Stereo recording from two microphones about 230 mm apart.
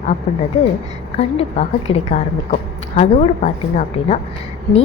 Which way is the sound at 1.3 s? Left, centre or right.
Left.